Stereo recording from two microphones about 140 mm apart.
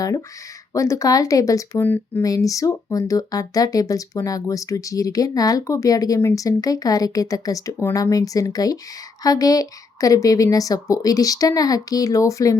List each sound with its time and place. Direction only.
0.7 s speech: 20° left (ahead or behind)
2.2 s speech: 25° left (ahead or behind)